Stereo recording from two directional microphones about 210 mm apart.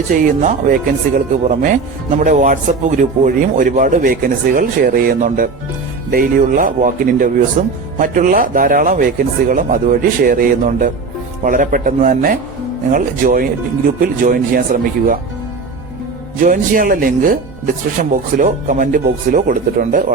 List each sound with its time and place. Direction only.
0.1 s a man's voice: 40° right (ahead or behind)
16.4 s a man's voice: 40° right (ahead or behind)